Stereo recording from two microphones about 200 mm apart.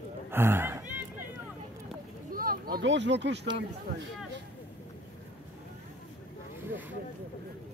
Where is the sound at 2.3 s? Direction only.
45° right (ahead or behind).